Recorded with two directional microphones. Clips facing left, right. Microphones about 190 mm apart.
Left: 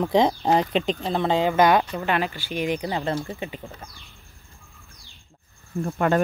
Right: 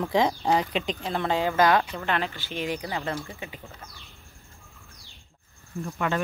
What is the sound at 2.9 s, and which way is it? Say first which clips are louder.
Speech: left 5 dB; 30° left (ahead or behind).